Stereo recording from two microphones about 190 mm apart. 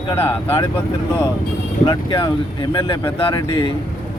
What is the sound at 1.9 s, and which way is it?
Speech, 20° left (ahead or behind).